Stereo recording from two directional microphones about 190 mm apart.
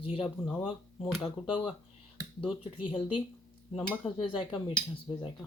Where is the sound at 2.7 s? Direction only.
30° left (ahead or behind).